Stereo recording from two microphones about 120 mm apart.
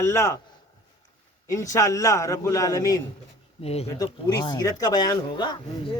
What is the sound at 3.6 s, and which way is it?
Speech, 60° left (ahead or behind).